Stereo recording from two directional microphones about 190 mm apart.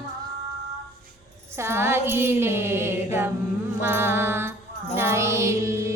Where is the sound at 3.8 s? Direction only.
10° right (ahead or behind).